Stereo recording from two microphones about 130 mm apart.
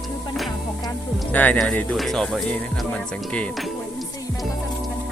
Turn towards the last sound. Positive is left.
turn(degrees=5)  # may be behind; listen again after turning